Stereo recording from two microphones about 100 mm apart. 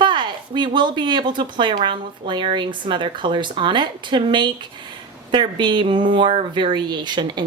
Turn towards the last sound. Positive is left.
turn(degrees=-50)  # may be behind; listen again after turning